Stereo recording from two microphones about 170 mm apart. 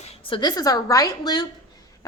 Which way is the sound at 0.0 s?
35° left (ahead or behind).